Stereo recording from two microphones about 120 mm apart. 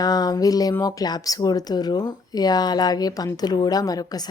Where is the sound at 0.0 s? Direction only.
35° left (ahead or behind).